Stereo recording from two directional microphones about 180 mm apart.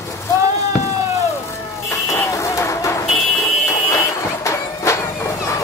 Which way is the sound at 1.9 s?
15° left (ahead or behind).